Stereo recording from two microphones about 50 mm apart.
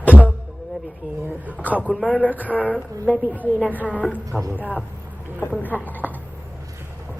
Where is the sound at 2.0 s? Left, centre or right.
Left.